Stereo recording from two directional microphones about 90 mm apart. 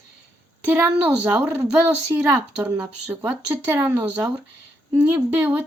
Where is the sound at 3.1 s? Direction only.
15° right (ahead or behind).